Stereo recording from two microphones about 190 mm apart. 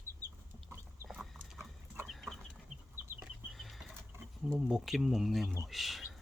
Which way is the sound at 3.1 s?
Centre (ahead or behind).